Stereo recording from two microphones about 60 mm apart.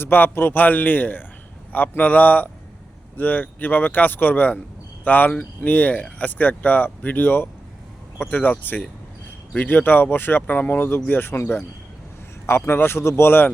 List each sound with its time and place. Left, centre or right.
0.0 s speech: left